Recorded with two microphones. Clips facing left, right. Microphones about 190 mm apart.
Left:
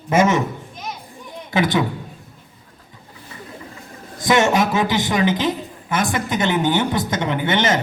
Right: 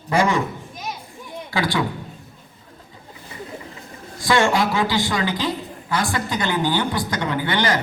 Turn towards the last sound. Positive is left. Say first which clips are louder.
# left 2 dB
turn(degrees=20)  # may be behind; listen again after turning